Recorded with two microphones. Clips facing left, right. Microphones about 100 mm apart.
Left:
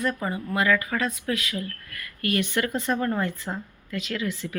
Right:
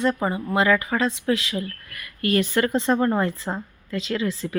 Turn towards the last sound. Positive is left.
turn(degrees=-35)  # may be behind; listen again after turning